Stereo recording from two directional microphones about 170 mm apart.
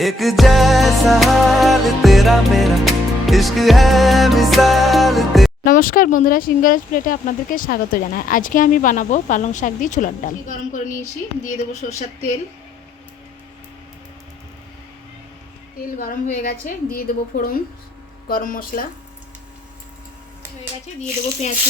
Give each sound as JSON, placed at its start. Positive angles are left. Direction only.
{"t": 0.0, "sound": "music", "side_deg": 0}
{"t": 5.6, "sound": "speech", "side_deg": 55}
{"t": 16.0, "sound": "a woman's voice", "side_deg": 55}
{"t": 20.8, "sound": "speech", "side_deg": 45}